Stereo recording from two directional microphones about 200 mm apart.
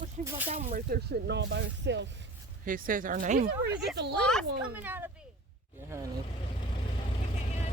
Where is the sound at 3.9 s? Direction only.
60° right (ahead or behind).